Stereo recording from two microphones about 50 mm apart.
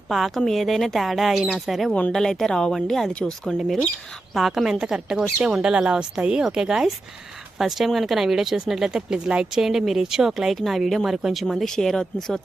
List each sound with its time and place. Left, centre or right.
0.1 s speech: centre
1.9 s speech: left
2.1 s speech: centre
4.4 s speech: centre
11.7 s speech: centre